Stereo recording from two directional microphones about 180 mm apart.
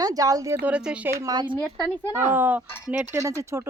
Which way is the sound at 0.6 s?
5° right (ahead or behind).